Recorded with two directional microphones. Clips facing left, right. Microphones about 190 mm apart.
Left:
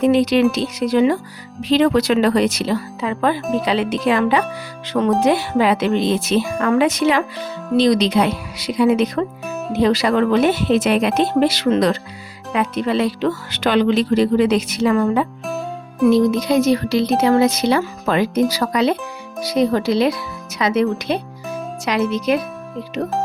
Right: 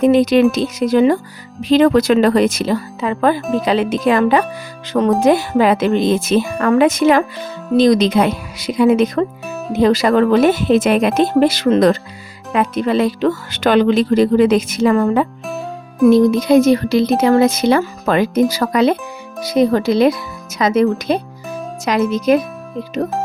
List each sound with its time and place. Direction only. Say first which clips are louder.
0.0 s speech: right 3 dB; 45° right (ahead or behind)